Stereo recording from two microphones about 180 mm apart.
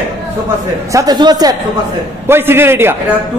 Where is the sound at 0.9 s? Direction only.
20° right (ahead or behind).